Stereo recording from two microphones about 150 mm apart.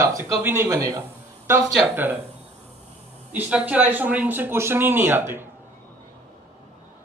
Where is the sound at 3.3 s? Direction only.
10° right (ahead or behind).